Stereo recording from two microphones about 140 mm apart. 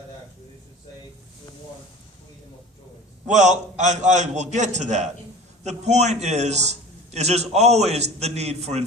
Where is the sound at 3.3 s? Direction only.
60° right (ahead or behind).